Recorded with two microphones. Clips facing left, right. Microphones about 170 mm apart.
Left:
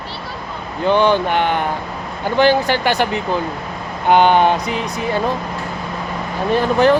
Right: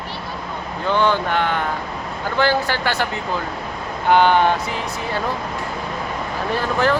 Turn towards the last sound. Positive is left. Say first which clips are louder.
# left 6 dB
turn(degrees=20)  # may be behind; listen again after turning